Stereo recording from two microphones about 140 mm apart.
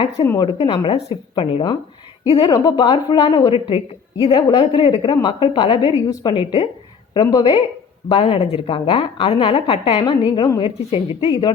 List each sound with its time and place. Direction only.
0.3 s a woman's voice: 35° left (ahead or behind)
8.1 s a woman's voice: 45° left (ahead or behind)